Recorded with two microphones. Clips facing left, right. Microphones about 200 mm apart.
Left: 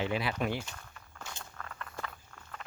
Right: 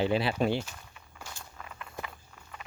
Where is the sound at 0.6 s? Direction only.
10° right (ahead or behind).